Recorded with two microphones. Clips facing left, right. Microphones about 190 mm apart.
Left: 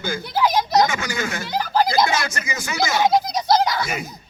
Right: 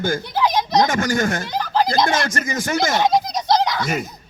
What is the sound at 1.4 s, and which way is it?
Speech, 5° left (ahead or behind).